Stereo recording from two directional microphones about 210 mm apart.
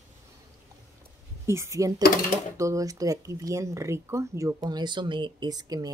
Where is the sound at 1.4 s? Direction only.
15° right (ahead or behind).